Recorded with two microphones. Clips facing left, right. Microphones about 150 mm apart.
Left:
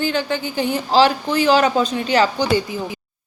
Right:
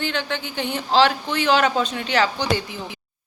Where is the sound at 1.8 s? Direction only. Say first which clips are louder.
Left 4 dB; 40° left (ahead or behind).